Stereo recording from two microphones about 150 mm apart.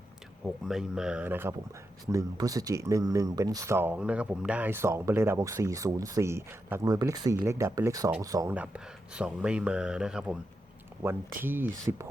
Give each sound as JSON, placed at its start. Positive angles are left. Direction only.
{"t": 0.4, "sound": "speech", "side_deg": -5}
{"t": 8.5, "sound": "speech", "side_deg": -10}